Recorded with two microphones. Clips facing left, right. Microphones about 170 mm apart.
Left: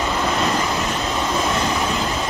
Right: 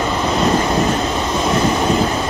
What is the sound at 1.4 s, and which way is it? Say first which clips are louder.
Vehicle: right 6 dB; 35° right (ahead or behind).